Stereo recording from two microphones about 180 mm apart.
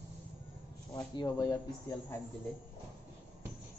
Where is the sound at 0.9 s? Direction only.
20° left (ahead or behind).